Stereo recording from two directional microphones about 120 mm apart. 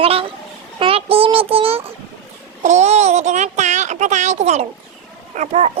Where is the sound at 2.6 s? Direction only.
70° right (ahead or behind).